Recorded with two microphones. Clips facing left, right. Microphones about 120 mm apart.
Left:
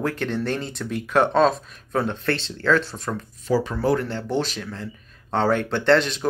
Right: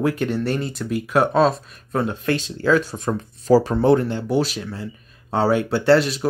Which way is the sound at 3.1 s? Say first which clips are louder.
Right 8 dB; 35° right (ahead or behind).